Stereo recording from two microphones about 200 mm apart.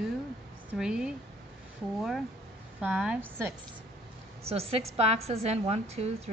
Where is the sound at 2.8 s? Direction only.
5° right (ahead or behind).